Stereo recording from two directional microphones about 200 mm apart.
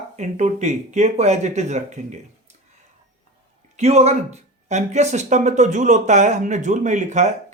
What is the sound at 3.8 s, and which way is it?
Speech, 35° right (ahead or behind).